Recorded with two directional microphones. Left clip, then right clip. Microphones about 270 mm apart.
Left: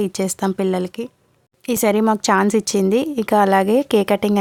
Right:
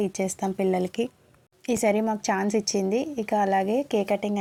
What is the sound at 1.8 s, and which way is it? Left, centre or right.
A woman's voice, left.